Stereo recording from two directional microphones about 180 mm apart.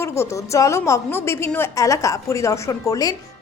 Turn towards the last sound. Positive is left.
turn(degrees=20)  # may be behind; listen again after turning